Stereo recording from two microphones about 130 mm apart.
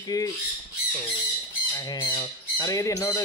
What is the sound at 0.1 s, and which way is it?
Speech, 30° left (ahead or behind).